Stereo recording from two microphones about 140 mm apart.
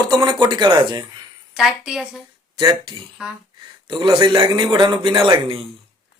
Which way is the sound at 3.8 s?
35° right (ahead or behind).